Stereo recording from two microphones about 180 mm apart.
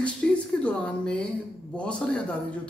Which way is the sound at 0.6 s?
5° left (ahead or behind).